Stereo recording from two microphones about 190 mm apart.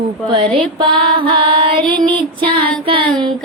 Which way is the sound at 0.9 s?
25° right (ahead or behind).